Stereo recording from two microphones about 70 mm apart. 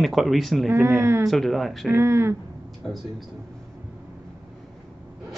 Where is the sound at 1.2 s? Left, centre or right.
Centre.